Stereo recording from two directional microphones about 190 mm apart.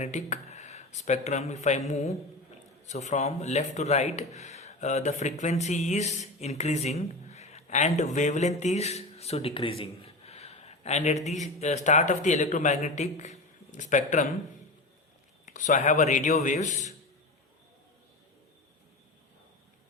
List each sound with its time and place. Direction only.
0.0 s speech: 35° left (ahead or behind)
15.4 s speech: 40° left (ahead or behind)